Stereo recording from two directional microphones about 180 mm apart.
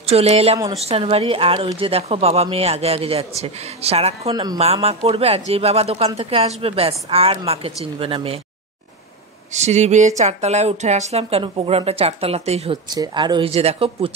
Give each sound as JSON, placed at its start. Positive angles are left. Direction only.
{"t": 0.0, "sound": "speech", "side_deg": -35}
{"t": 4.3, "sound": "speech", "side_deg": -20}
{"t": 4.8, "sound": "speech", "side_deg": -35}
{"t": 9.5, "sound": "speech", "side_deg": -40}
{"t": 12.9, "sound": "speech", "side_deg": -25}